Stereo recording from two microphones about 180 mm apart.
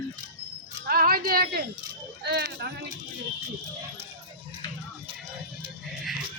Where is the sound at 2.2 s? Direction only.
65° right (ahead or behind).